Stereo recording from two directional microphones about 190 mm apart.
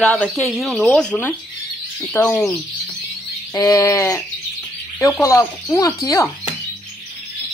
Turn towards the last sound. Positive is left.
turn(degrees=15)  # may be behind; listen again after turning